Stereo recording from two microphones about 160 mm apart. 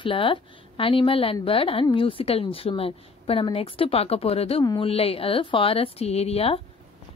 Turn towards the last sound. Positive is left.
turn(degrees=40)  # may be behind; listen again after turning